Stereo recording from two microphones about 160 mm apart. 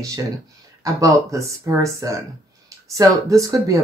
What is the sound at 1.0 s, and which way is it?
Speech, 20° right (ahead or behind).